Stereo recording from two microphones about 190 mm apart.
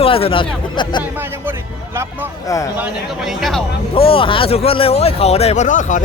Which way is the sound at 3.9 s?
30° left (ahead or behind).